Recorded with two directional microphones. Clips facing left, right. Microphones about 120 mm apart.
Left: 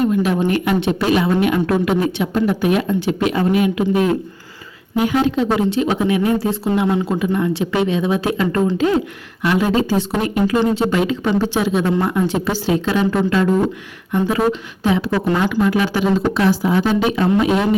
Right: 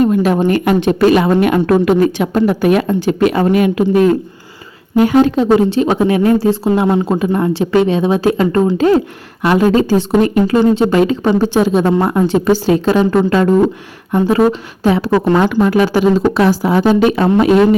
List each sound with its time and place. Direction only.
0.0 s speech: 45° right (ahead or behind)
11.9 s speech: 55° right (ahead or behind)
12.3 s speech: 30° right (ahead or behind)
12.7 s speech: 45° right (ahead or behind)
16.6 s speech: 50° right (ahead or behind)